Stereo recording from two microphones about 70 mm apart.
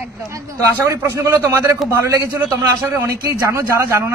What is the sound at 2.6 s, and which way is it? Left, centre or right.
Speech, right.